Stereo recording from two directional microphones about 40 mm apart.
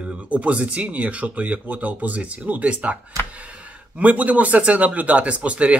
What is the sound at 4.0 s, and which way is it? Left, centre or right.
Speech, right.